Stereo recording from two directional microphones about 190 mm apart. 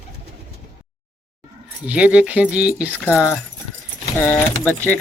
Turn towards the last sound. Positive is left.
turn(degrees=10)  # may be behind; listen again after turning